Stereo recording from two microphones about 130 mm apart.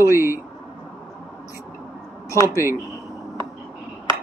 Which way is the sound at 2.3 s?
25° left (ahead or behind).